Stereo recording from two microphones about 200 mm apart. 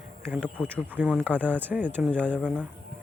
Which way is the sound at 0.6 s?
10° right (ahead or behind).